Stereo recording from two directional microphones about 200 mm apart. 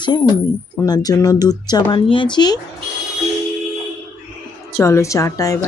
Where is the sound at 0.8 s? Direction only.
20° left (ahead or behind).